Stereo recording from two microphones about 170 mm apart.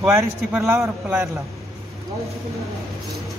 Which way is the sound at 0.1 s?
15° right (ahead or behind).